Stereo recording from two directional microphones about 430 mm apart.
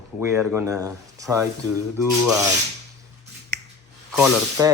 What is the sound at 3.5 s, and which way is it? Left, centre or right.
Finger snapping, right.